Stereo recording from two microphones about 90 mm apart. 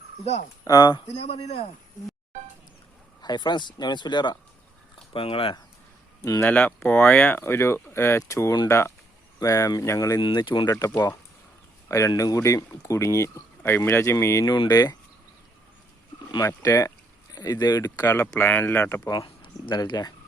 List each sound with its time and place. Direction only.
0.6 s speech: 40° left (ahead or behind)
0.9 s speech: 90° left
3.2 s speech: 50° left (ahead or behind)
5.1 s speech: 90° left
6.4 s speech: 20° left (ahead or behind); by 10.2 s 35° left (ahead or behind)
10.2 s speech: 60° left (ahead or behind)
10.7 s speech: 40° left (ahead or behind)
13.6 s speech: 25° left (ahead or behind)
14.7 s speech: 45° left (ahead or behind)
16.5 s speech: 40° left (ahead or behind)
18.0 s speech: 30° left (ahead or behind)
19.2 s a sound: 65° left (ahead or behind)
19.8 s speech: 50° left (ahead or behind)